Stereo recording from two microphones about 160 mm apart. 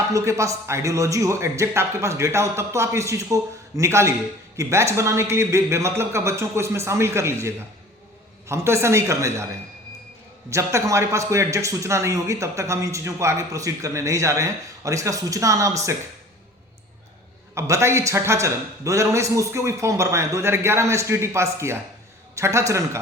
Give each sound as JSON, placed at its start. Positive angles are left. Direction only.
{"t": 0.1, "sound": "a man's voice", "side_deg": -20}
{"t": 10.5, "sound": "a man's voice", "side_deg": -20}
{"t": 17.5, "sound": "a man's voice", "side_deg": -15}